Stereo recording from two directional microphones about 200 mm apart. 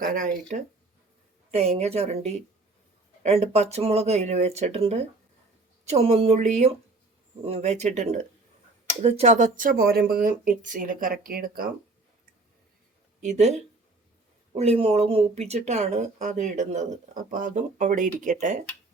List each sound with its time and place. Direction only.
0.0 s speech: 40° right (ahead or behind)
1.5 s speech: 30° right (ahead or behind); by 11.7 s 45° right (ahead or behind)
13.2 s speech: 35° right (ahead or behind)